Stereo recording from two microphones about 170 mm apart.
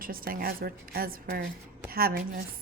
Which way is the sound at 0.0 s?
60° right (ahead or behind).